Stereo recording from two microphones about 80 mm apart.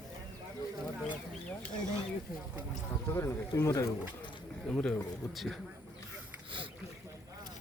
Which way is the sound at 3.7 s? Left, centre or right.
Left.